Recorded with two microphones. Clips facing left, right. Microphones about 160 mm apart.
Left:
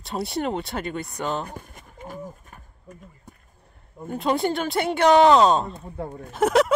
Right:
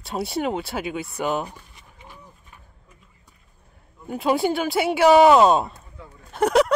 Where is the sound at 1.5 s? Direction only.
50° left (ahead or behind).